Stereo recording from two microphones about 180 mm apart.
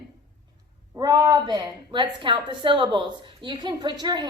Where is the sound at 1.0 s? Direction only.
20° right (ahead or behind).